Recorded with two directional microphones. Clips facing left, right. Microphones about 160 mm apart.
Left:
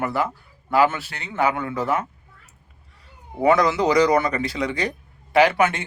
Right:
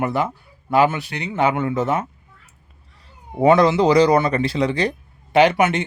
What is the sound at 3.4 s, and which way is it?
Speech, 25° right (ahead or behind).